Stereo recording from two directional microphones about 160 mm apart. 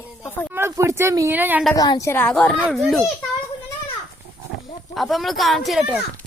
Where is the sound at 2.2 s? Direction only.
10° left (ahead or behind).